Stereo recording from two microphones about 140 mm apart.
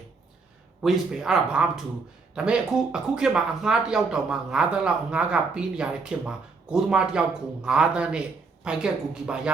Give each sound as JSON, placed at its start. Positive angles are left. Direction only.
{"t": 0.8, "sound": "a woman's voice", "side_deg": -5}